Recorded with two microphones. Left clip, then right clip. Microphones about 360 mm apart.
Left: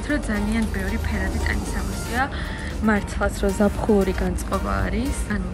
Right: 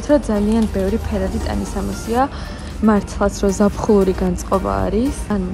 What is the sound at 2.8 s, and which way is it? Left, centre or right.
Speech, left.